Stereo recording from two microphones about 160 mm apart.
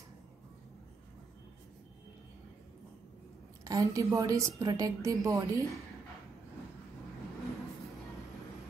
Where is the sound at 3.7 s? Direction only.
20° right (ahead or behind).